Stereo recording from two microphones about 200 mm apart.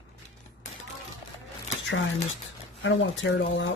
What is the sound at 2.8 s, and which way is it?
Speech, 65° left (ahead or behind).